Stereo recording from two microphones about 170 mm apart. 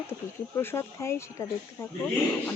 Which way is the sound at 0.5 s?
15° left (ahead or behind).